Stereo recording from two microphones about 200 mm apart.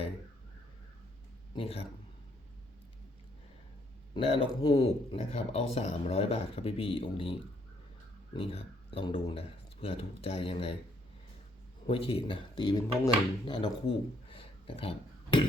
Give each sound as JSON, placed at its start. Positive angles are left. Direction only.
{"t": 1.5, "sound": "speech", "side_deg": 30}
{"t": 4.1, "sound": "speech", "side_deg": 30}
{"t": 11.9, "sound": "speech", "side_deg": 30}
{"t": 14.3, "sound": "a sound", "side_deg": 30}